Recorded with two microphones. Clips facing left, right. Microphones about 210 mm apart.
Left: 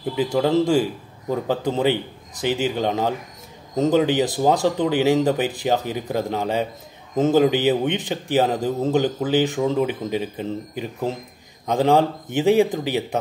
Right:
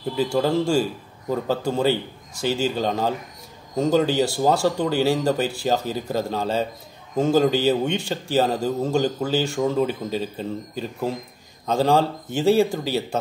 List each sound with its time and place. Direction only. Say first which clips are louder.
0.1 s speech: left 2 dB; 20° left (ahead or behind)